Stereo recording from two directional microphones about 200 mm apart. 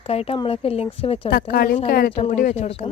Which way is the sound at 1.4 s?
45° left (ahead or behind).